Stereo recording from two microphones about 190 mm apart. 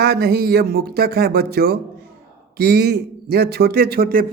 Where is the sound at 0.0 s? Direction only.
55° right (ahead or behind).